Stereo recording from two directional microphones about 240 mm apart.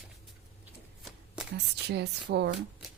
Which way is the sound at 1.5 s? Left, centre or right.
Right.